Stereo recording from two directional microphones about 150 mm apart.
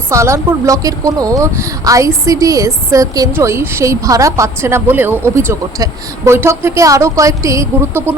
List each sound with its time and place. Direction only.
0.1 s speech: 20° right (ahead or behind)